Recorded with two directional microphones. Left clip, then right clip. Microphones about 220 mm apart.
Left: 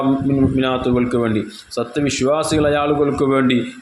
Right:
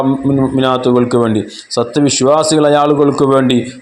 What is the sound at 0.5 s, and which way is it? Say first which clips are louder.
A man's voice: right 6 dB; 25° right (ahead or behind).